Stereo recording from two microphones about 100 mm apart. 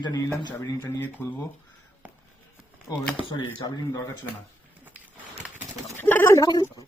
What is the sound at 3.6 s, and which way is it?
Speech, 35° left (ahead or behind).